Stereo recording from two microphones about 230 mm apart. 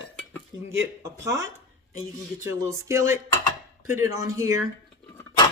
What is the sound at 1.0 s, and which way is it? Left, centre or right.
Speech, centre.